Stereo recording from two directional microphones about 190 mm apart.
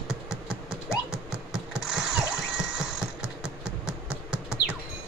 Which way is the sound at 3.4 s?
5° right (ahead or behind).